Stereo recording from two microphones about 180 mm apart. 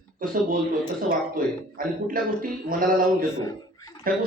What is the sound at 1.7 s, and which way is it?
A man's voice, 50° right (ahead or behind).